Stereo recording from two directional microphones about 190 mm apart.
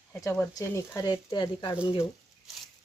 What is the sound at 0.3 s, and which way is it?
Speech, 15° left (ahead or behind).